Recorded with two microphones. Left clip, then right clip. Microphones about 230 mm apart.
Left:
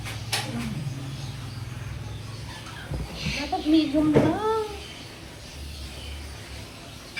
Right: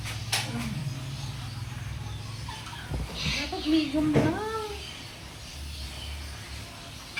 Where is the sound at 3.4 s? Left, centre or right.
Centre.